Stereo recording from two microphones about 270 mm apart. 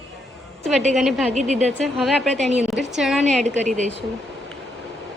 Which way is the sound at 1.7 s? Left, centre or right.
Centre.